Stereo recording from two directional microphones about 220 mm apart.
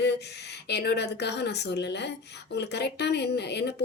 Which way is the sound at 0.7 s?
50° left (ahead or behind).